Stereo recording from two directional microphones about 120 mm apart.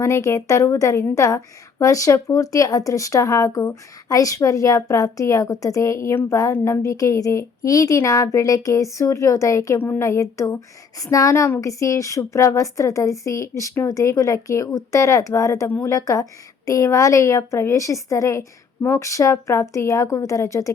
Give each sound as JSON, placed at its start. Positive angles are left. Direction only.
{"t": 0.0, "sound": "speech", "side_deg": 25}